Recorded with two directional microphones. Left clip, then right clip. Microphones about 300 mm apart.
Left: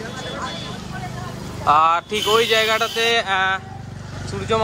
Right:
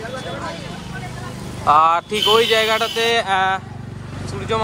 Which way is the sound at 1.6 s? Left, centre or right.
Centre.